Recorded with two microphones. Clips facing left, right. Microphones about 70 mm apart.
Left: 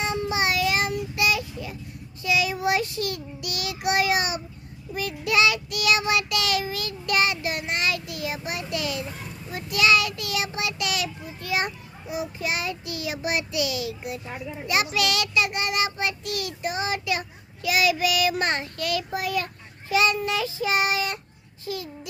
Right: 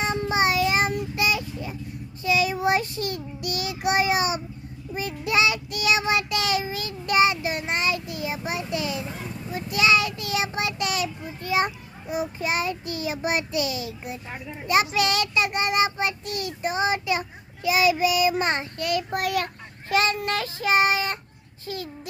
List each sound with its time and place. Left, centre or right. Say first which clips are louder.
0.0 s child singing: right 2 dB; right
19.1 s child singing: right 2 dB; right
19.9 s child singing: left 1 dB; right